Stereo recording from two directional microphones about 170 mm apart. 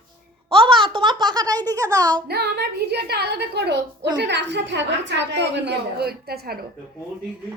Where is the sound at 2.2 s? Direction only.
70° right (ahead or behind).